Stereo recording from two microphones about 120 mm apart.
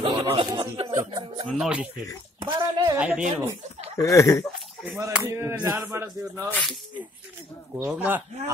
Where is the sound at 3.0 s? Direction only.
10° right (ahead or behind).